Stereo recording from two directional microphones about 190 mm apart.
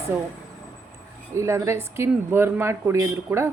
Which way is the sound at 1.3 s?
15° right (ahead or behind).